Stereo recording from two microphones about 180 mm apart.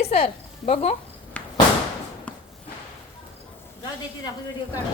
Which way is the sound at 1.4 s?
5° left (ahead or behind).